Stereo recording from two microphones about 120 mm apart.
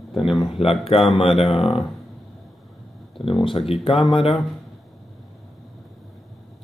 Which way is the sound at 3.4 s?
50° left (ahead or behind).